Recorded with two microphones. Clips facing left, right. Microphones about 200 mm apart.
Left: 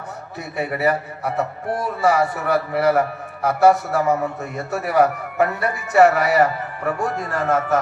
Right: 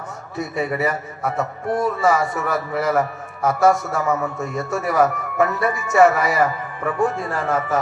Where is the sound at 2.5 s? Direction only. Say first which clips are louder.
Left 5 dB; 65° left (ahead or behind).